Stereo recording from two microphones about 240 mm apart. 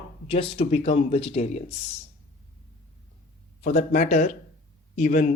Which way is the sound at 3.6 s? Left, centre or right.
Left.